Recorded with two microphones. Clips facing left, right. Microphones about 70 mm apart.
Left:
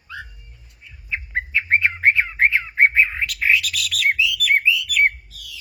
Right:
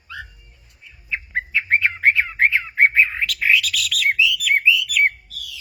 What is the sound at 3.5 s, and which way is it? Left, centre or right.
Bird, left.